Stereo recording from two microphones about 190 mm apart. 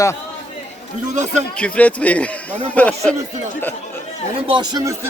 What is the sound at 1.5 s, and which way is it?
Speech, 5° left (ahead or behind).